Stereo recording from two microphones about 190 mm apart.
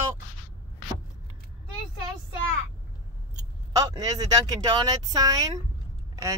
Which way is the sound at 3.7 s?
20° right (ahead or behind).